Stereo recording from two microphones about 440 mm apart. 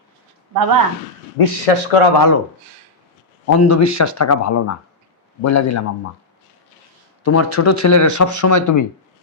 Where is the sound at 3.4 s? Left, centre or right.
Left.